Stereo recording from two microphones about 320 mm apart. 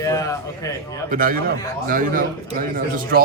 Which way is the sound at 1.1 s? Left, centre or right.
Right.